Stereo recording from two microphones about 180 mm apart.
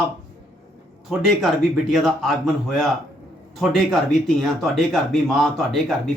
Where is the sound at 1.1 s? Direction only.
Centre (ahead or behind).